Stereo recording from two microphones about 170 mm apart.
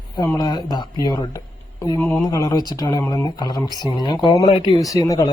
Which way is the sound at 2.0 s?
10° left (ahead or behind).